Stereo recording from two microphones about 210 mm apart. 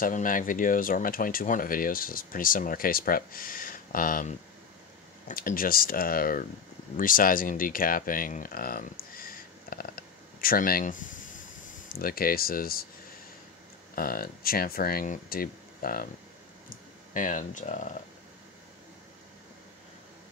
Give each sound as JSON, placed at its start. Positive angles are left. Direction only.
{"t": 0.0, "sound": "speech", "side_deg": 40}
{"t": 9.7, "sound": "a sound", "side_deg": 45}
{"t": 11.9, "sound": "speech", "side_deg": 45}
{"t": 13.9, "sound": "speech", "side_deg": 45}
{"t": 16.6, "sound": "clicking", "side_deg": 40}